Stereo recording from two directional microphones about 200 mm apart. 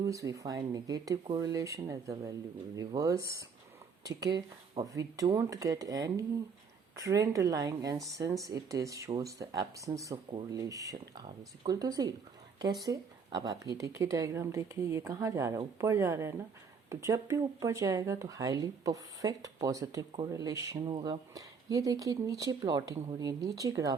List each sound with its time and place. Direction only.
0.0 s speech: 15° right (ahead or behind)